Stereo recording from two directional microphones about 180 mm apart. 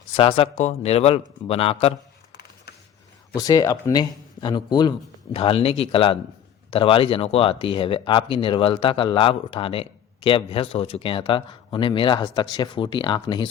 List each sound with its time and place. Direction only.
0.2 s speech: 30° left (ahead or behind)
2.3 s a sound: 65° left (ahead or behind)
3.3 s speech: 20° left (ahead or behind)